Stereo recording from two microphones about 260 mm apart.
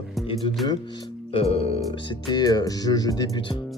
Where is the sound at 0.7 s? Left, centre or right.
Centre.